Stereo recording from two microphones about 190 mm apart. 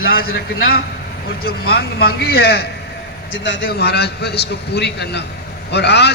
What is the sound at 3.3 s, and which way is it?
A man's voice, 75° left (ahead or behind).